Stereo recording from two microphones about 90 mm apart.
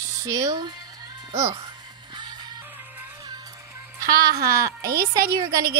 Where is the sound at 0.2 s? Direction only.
35° right (ahead or behind).